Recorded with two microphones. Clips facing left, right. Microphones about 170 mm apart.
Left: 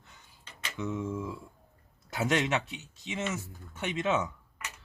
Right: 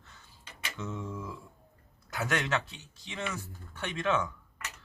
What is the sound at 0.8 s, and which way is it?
Speech, 15° left (ahead or behind).